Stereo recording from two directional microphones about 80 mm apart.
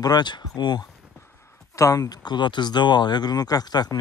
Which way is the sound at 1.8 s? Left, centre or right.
Left.